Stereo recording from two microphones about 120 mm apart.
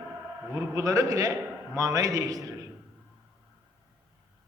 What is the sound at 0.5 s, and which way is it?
A man's voice, 25° right (ahead or behind).